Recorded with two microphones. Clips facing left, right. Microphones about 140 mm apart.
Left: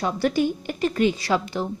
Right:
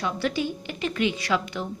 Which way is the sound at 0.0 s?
45° left (ahead or behind).